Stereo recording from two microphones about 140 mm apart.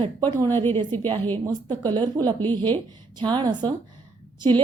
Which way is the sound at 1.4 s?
30° right (ahead or behind).